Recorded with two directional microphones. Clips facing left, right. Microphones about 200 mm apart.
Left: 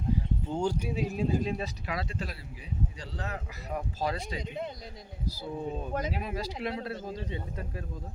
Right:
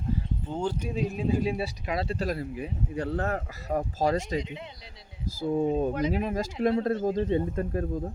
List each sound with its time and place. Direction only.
0.4 s speech: 10° left (ahead or behind); by 1.7 s 10° right (ahead or behind)
1.9 s speech: 25° right (ahead or behind)
2.1 s speech: 45° right (ahead or behind)